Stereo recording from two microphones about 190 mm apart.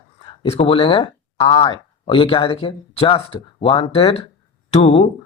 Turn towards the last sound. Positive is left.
turn(degrees=35)  # may be behind; listen again after turning